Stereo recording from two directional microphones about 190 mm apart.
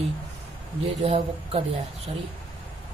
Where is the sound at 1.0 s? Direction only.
35° right (ahead or behind).